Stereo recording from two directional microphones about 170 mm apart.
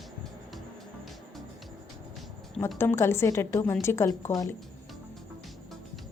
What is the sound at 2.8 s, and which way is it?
A woman's voice, 15° left (ahead or behind).